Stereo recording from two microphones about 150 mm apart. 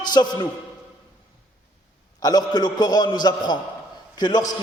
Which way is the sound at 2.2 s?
25° left (ahead or behind).